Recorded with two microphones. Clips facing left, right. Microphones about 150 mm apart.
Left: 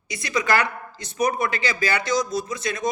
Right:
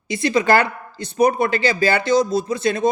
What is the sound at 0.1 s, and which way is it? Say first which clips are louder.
Speech: right 7 dB; 25° right (ahead or behind).